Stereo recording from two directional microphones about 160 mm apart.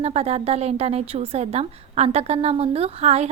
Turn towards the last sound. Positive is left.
turn(degrees=-40)  # may be behind; listen again after turning